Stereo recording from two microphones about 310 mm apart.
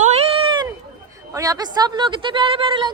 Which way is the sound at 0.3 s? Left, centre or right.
Centre.